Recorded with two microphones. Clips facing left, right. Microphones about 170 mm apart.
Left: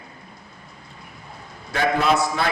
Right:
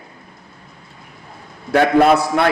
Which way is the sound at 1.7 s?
60° right (ahead or behind).